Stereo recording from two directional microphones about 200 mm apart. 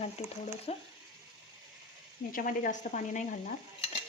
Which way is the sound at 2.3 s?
45° left (ahead or behind).